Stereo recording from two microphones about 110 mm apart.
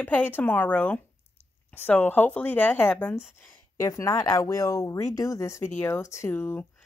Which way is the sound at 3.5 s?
30° left (ahead or behind).